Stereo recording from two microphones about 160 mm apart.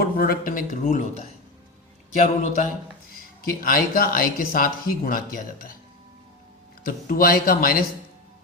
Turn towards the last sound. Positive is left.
turn(degrees=65)  # may be behind; listen again after turning